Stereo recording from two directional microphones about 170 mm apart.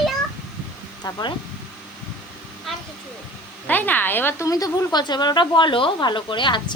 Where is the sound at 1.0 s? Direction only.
25° left (ahead or behind).